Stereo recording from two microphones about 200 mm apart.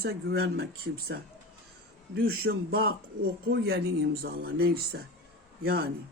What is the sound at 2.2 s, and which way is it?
Speech, 50° right (ahead or behind).